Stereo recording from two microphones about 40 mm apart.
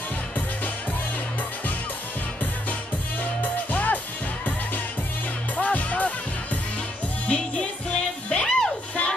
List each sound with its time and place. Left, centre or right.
3.7 s music: left
5.6 s music: left
7.2 s music: left